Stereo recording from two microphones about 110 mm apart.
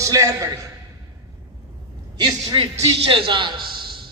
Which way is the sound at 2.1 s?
40° right (ahead or behind).